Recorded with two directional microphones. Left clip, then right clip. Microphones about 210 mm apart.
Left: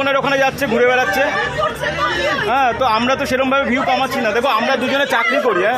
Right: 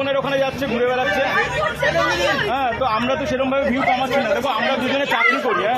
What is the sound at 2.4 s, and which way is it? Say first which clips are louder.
A man's voice: left 5 dB; 45° left (ahead or behind).